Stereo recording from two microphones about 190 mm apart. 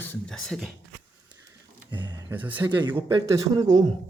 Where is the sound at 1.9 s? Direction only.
25° right (ahead or behind).